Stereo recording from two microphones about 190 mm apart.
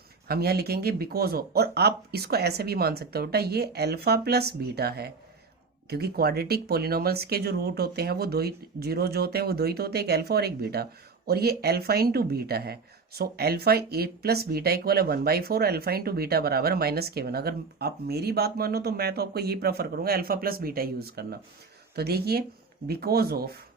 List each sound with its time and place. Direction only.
0.3 s speech: 55° right (ahead or behind)